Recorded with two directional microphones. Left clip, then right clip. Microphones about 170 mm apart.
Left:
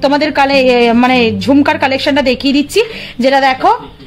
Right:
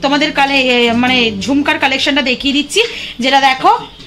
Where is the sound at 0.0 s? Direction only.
65° left (ahead or behind).